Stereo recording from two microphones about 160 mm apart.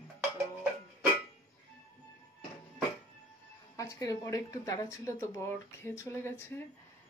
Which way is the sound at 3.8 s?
20° left (ahead or behind).